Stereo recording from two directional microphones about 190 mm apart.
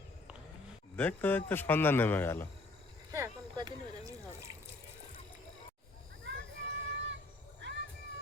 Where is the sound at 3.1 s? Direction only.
20° right (ahead or behind).